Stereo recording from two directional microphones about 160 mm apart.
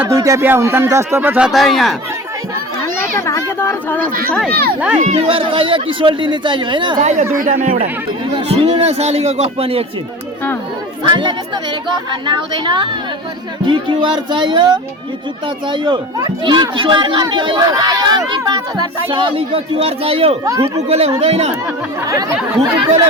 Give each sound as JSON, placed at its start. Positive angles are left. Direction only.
{"t": 0.0, "sound": "speech", "side_deg": -20}
{"t": 3.2, "sound": "children playing", "side_deg": 20}
{"t": 3.6, "sound": "a sound", "side_deg": 15}
{"t": 4.3, "sound": "speech", "side_deg": 10}
{"t": 4.5, "sound": "speech", "side_deg": -70}
{"t": 5.0, "sound": "speech", "side_deg": -35}
{"t": 7.0, "sound": "speech", "side_deg": -45}
{"t": 8.3, "sound": "speech", "side_deg": -35}
{"t": 11.0, "sound": "speech", "side_deg": -30}
{"t": 20.4, "sound": "speech", "side_deg": -20}
{"t": 20.8, "sound": "speech", "side_deg": -40}
{"t": 22.0, "sound": "speech", "side_deg": -20}